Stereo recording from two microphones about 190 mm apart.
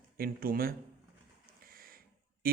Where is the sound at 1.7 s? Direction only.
50° right (ahead or behind).